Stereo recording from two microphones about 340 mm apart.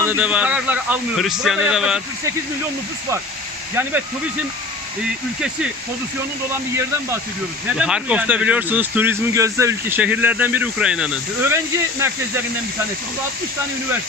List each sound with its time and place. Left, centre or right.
0.0 s speech: centre
7.8 s speech: centre